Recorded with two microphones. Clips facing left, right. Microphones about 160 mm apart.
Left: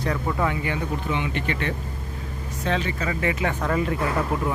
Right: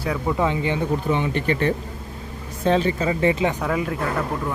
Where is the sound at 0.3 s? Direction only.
25° right (ahead or behind).